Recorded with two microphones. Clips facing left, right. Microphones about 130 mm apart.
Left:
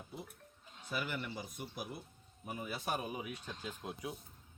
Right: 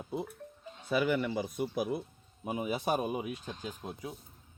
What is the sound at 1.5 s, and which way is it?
Speech, 60° right (ahead or behind).